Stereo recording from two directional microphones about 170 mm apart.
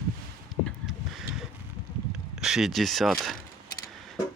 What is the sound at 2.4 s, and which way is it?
Speech, centre (ahead or behind).